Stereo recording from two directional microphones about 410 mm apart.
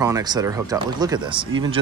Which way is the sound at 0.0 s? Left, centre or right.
Centre.